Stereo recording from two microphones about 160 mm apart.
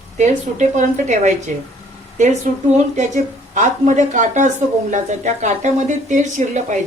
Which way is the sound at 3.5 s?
50° right (ahead or behind).